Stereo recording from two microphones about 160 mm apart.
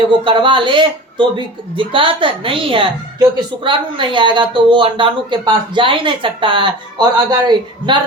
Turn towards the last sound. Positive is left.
turn(degrees=-25)  # may be behind; listen again after turning